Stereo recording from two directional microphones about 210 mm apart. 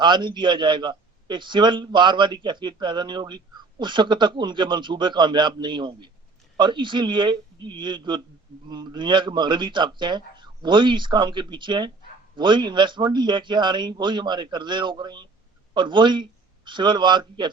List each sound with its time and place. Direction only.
0.0 s a man's voice: 20° right (ahead or behind)